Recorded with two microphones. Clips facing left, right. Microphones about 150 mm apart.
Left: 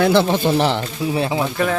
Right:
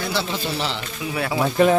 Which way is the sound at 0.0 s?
55° left (ahead or behind).